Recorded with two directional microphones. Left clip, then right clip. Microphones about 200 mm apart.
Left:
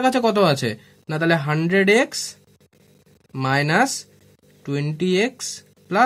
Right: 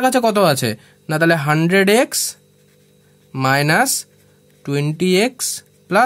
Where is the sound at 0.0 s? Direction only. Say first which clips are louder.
Right 3 dB; 35° right (ahead or behind).